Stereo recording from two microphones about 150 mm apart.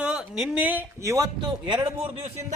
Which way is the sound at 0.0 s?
5° right (ahead or behind).